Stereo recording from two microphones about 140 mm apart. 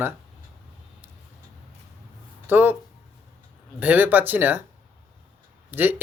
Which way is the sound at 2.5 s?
15° right (ahead or behind).